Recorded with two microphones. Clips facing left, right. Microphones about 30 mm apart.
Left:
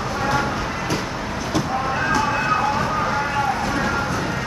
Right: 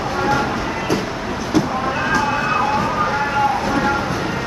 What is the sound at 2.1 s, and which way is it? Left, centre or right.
Emergency vehicle, centre.